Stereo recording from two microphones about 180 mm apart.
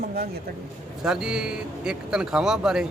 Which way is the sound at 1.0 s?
5° right (ahead or behind).